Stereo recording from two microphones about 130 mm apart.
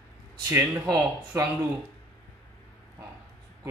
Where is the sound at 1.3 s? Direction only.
20° right (ahead or behind).